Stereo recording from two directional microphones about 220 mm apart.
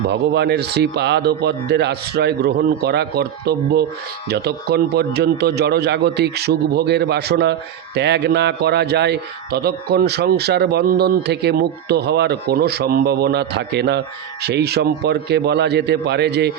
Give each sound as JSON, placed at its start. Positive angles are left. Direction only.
{"t": 0.1, "sound": "a man's voice", "side_deg": -50}